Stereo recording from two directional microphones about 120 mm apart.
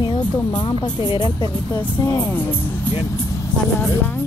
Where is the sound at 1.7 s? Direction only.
20° left (ahead or behind).